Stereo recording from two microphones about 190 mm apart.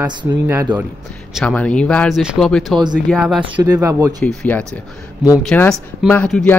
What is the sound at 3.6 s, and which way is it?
Speech, 20° right (ahead or behind).